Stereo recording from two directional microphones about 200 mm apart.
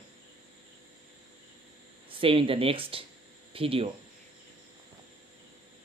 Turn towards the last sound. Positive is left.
turn(degrees=-30)  # may be behind; listen again after turning